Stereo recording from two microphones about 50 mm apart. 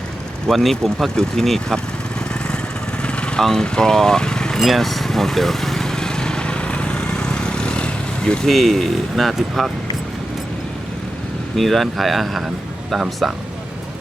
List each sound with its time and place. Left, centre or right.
0.5 s speech: centre
3.0 s vehicle: left
3.4 s speech: centre
4.6 s vehicle: centre
8.4 s speech: centre
11.5 s speech: centre